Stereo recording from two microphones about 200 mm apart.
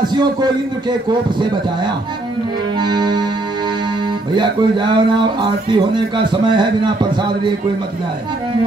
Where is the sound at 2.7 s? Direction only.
20° right (ahead or behind).